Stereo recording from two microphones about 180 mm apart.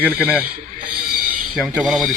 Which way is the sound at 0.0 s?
5° right (ahead or behind).